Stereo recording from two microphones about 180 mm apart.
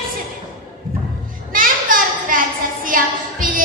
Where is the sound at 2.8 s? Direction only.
50° right (ahead or behind).